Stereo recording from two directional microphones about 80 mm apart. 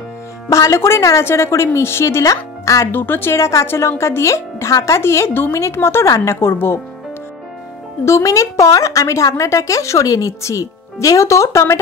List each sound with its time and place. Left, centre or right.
0.5 s a woman's voice: left
2.9 s a woman's voice: left
8.0 s a woman's voice: left